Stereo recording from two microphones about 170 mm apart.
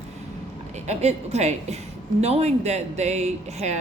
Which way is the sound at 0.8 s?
40° right (ahead or behind).